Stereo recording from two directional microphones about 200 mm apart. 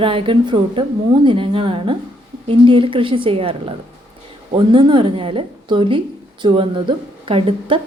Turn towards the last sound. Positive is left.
turn(degrees=-25)  # may be behind; listen again after turning